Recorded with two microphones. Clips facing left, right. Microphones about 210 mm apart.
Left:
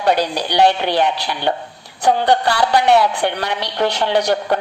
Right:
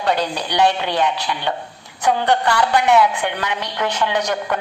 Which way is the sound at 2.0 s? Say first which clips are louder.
Left 2 dB; 35° left (ahead or behind).